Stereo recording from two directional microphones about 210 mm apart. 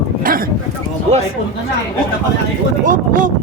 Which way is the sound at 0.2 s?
40° right (ahead or behind).